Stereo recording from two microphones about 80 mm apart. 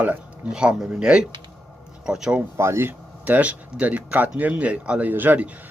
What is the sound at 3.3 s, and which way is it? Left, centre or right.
Speech, centre.